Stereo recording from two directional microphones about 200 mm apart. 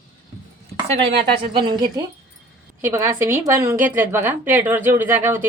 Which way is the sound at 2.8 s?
15° right (ahead or behind).